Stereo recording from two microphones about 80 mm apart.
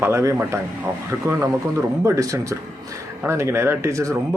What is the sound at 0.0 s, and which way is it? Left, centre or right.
Speech, right.